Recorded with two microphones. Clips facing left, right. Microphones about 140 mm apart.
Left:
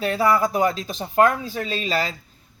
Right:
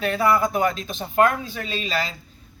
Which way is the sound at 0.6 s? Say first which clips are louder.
Left 1 dB; 35° left (ahead or behind).